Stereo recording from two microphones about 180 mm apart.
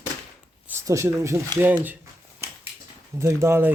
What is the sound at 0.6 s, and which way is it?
Speech, 15° right (ahead or behind).